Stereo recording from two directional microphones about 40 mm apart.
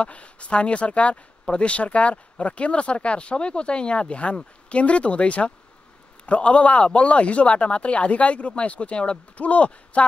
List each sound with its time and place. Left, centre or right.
0.0 s speech: left